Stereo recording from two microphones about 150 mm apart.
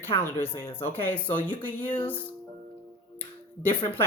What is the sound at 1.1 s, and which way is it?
Speech, 10° left (ahead or behind).